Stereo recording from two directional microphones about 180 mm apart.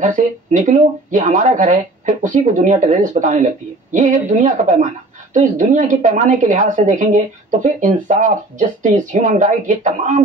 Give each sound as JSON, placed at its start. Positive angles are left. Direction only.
{"t": 0.0, "sound": "a woman's voice", "side_deg": -45}